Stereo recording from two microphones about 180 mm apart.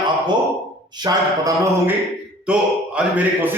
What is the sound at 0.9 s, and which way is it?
Speech, 20° right (ahead or behind).